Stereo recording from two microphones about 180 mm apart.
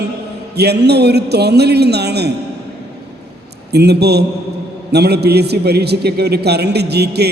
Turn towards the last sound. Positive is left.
turn(degrees=-65)  # may be behind; listen again after turning